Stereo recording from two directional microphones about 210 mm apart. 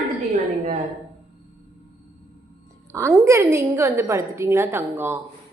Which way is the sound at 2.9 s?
10° right (ahead or behind).